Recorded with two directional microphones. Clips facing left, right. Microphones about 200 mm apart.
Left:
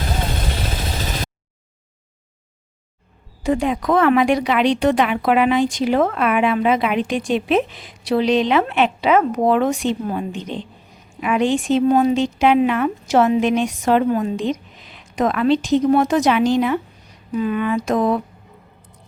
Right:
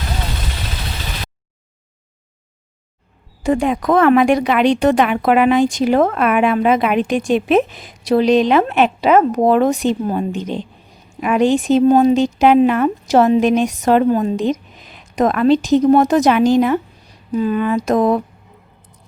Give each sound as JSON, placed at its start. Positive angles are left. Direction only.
{"t": 0.5, "sound": "vehicle", "side_deg": 50}
{"t": 3.4, "sound": "speech", "side_deg": -50}